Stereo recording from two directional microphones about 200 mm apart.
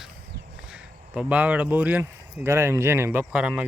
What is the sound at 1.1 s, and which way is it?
Speech, 5° right (ahead or behind).